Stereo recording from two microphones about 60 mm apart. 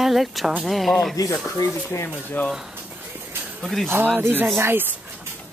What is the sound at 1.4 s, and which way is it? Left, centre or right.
Speech, left.